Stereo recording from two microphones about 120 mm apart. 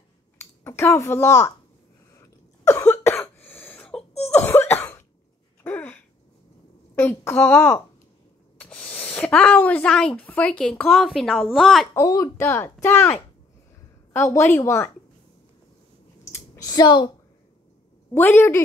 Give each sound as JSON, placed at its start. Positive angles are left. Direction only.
{"t": 0.4, "sound": "a child's voice", "side_deg": 20}
{"t": 2.1, "sound": "cough", "side_deg": 25}
{"t": 5.6, "sound": "a sound", "side_deg": 15}
{"t": 7.0, "sound": "a woman's voice", "side_deg": 20}
{"t": 11.9, "sound": "a child's voice", "side_deg": 25}
{"t": 16.3, "sound": "a sound", "side_deg": 25}
{"t": 18.1, "sound": "a child's voice", "side_deg": 20}